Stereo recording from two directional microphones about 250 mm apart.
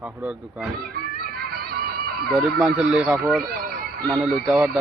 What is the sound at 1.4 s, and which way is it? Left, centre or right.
Music, right.